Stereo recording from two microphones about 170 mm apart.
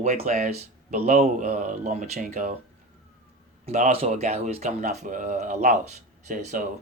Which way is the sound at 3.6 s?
40° right (ahead or behind).